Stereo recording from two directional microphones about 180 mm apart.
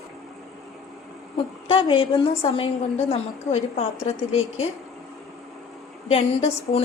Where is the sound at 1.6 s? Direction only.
30° left (ahead or behind).